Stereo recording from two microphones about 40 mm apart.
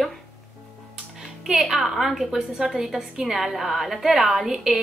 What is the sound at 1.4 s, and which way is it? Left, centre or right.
A woman's voice, centre.